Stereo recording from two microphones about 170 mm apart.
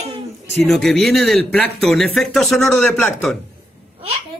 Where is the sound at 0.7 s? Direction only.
5° left (ahead or behind).